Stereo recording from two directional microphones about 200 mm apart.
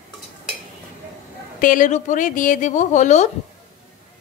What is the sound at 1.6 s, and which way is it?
A woman's voice, 40° left (ahead or behind).